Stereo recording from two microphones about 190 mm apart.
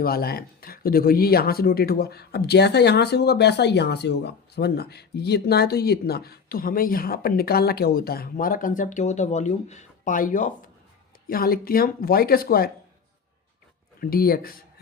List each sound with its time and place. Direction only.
0.0 s speech: 55° left (ahead or behind)
14.0 s speech: 50° left (ahead or behind)